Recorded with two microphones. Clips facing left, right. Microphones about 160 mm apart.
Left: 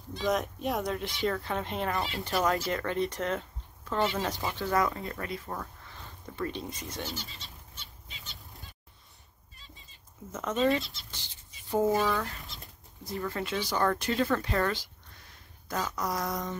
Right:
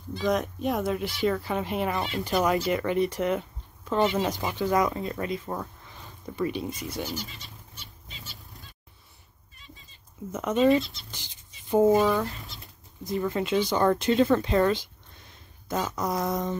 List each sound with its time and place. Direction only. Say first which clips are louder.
0.1 s speech: right 3 dB; centre (ahead or behind)
2.2 s speech: right 4 dB; 15° right (ahead or behind)
7.3 s goat: right 2 dB; 10° right (ahead or behind)
10.3 s speech: right 6 dB; 15° right (ahead or behind)
10.8 s speech: right 8 dB; centre (ahead or behind)
11.1 s speech: right 3 dB; 15° right (ahead or behind)